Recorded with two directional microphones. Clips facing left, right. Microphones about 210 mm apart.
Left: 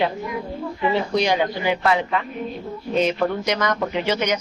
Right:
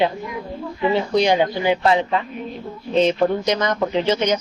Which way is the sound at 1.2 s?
25° right (ahead or behind).